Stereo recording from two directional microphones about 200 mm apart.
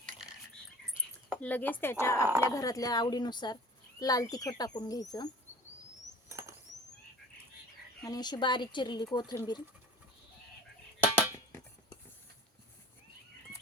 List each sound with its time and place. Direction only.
1.3 s speech: 10° left (ahead or behind)
2.2 s speech: 10° right (ahead or behind)
2.6 s speech: 15° left (ahead or behind)
8.0 s speech: 20° left (ahead or behind)